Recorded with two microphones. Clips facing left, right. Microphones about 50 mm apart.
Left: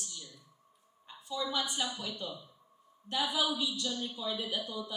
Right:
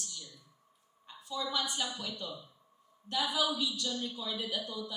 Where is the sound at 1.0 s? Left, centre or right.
Left.